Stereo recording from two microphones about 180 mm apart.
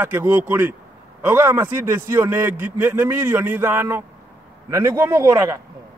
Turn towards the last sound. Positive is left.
turn(degrees=-15)  # may be behind; listen again after turning